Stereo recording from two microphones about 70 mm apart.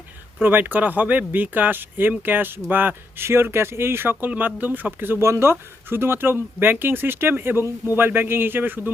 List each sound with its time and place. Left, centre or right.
0.4 s speech: right